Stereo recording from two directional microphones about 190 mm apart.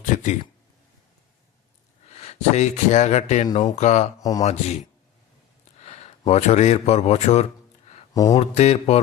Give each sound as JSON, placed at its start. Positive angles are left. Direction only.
{"t": 0.0, "sound": "speech", "side_deg": 40}
{"t": 2.0, "sound": "speech", "side_deg": 35}
{"t": 8.1, "sound": "speech", "side_deg": 20}
{"t": 8.4, "sound": "speech", "side_deg": 35}